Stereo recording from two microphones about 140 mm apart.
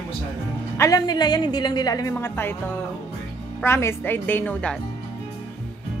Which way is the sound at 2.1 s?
15° left (ahead or behind).